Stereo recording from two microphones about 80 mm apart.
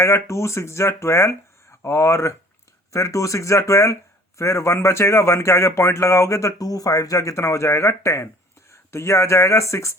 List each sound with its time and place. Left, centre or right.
0.0 s speech: left